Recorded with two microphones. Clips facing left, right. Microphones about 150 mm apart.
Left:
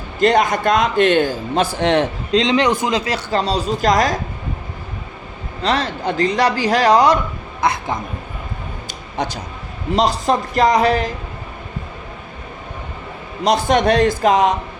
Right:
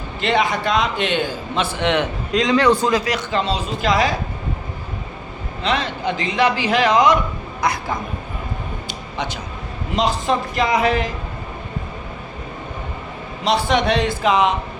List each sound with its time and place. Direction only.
0.2 s a man's voice: 45° left (ahead or behind)
5.6 s a man's voice: 40° left (ahead or behind)
9.1 s a man's voice: 40° left (ahead or behind)
13.4 s a man's voice: 45° left (ahead or behind)